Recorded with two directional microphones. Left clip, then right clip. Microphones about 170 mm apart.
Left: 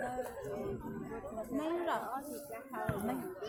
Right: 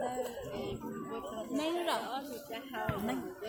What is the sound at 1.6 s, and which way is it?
Speech, 45° right (ahead or behind).